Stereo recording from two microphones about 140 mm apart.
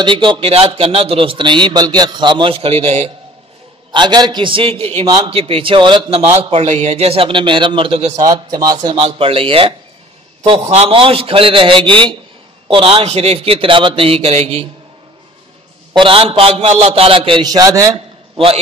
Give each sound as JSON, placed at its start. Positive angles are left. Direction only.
{"t": 0.0, "sound": "speech", "side_deg": -35}
{"t": 3.9, "sound": "a man's voice", "side_deg": -30}
{"t": 8.2, "sound": "a man's voice", "side_deg": -25}
{"t": 15.9, "sound": "speech", "side_deg": -40}